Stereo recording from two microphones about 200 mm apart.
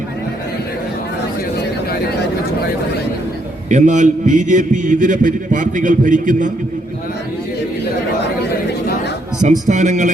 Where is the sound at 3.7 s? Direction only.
40° right (ahead or behind).